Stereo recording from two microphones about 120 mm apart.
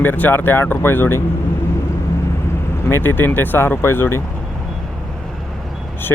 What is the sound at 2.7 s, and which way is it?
Speech, 20° left (ahead or behind).